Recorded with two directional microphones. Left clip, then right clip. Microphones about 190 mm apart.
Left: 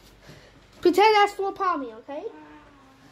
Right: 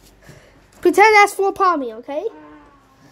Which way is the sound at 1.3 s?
40° right (ahead or behind).